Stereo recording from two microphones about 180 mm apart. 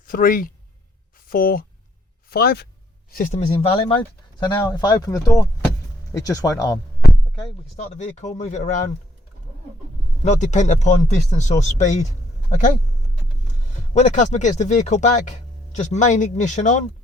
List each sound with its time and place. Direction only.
0.0 s speech: 50° left (ahead or behind)
3.1 s speech: 45° left (ahead or behind)
3.4 s speech: 30° left (ahead or behind)
5.6 s vehicle: 15° left (ahead or behind)
7.9 s speech: 40° left (ahead or behind)
10.2 s speech: 40° left (ahead or behind)
13.9 s speech: 40° left (ahead or behind)